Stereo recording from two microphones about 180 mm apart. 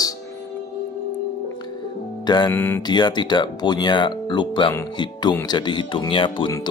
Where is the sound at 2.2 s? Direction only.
25° left (ahead or behind).